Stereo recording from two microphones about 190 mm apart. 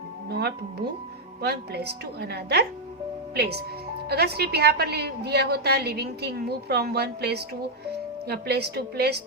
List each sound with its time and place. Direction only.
0.3 s a woman's voice: 60° right (ahead or behind)